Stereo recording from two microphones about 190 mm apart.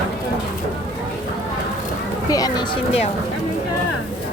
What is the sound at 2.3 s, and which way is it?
Speech, 20° left (ahead or behind).